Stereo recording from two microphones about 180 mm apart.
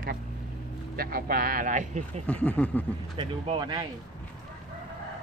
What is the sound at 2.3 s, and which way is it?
Speech, 10° left (ahead or behind).